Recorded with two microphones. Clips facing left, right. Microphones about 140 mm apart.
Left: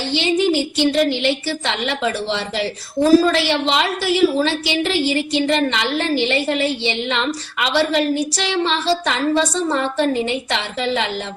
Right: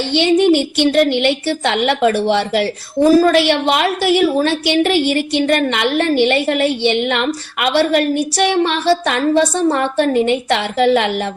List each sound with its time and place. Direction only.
0.1 s a woman's voice: 65° right (ahead or behind)